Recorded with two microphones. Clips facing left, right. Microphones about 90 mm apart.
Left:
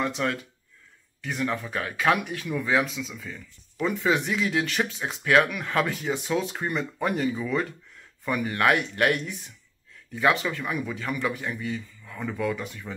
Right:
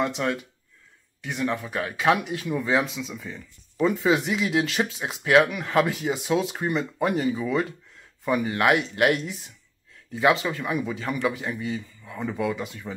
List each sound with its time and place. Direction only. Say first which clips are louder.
0.2 s a man's voice: right 1 dB; 25° right (ahead or behind)
10.3 s a man's voice: right 2 dB; 30° right (ahead or behind)